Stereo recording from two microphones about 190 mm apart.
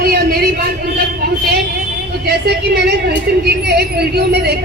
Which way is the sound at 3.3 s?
55° right (ahead or behind).